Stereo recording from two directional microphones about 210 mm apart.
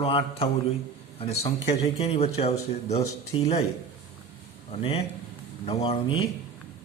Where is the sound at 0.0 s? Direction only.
25° left (ahead or behind).